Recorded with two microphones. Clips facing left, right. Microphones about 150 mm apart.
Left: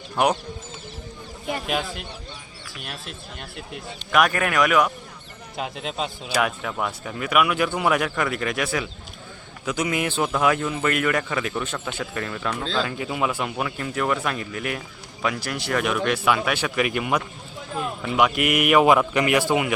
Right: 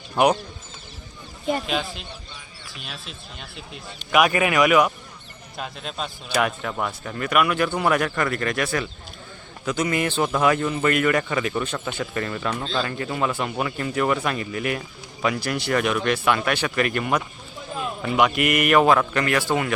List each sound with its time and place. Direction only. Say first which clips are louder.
0.2 s speech: right 2 dB; centre (ahead or behind)
4.1 s speech: right 2 dB; 5° right (ahead or behind)
5.5 s speech: left 3 dB; 15° left (ahead or behind)
6.2 s speech: right 2 dB; 5° left (ahead or behind)
18.9 s speech: left 1 dB; 15° left (ahead or behind)